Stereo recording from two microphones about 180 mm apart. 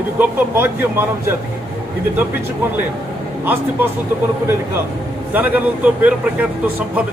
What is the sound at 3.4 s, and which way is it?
Speech, 10° right (ahead or behind).